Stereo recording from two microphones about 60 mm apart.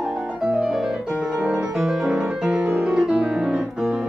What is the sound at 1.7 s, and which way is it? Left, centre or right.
Music, centre.